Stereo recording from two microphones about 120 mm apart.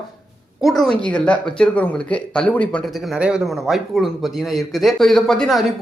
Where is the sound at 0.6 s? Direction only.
Centre (ahead or behind).